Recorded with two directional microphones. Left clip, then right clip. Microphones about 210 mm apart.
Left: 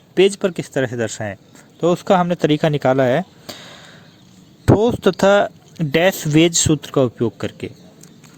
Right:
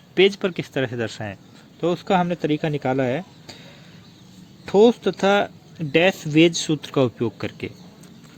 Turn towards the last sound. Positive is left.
turn(degrees=25)  # may be behind; listen again after turning